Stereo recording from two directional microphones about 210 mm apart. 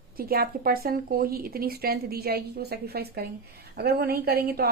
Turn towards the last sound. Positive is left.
turn(degrees=-45)  # may be behind; listen again after turning